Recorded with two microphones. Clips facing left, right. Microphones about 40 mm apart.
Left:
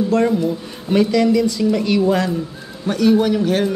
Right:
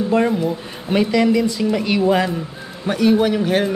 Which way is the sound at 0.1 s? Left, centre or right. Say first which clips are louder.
Right 2 dB; centre.